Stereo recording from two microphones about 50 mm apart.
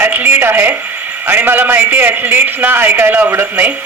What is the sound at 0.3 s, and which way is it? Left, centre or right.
A man's voice, right.